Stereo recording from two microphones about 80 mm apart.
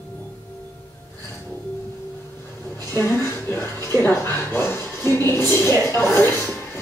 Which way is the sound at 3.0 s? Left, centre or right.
Left.